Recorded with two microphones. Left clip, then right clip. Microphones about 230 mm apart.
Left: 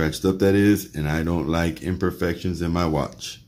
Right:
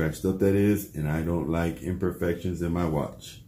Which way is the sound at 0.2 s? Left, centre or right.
Left.